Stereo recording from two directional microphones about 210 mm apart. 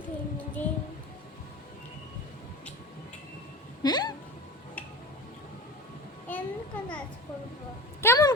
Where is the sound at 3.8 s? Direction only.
20° left (ahead or behind).